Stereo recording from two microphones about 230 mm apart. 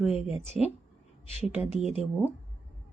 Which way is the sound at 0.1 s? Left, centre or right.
Left.